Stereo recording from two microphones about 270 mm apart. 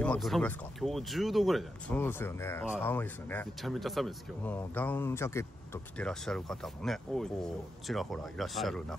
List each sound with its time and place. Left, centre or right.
0.0 s speech: centre